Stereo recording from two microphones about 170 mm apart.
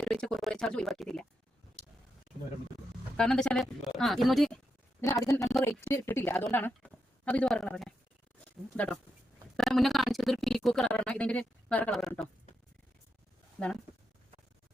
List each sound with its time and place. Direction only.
0.0 s speech: 5° left (ahead or behind)
3.2 s a woman's voice: 5° left (ahead or behind)
4.9 s a man's voice: 15° left (ahead or behind)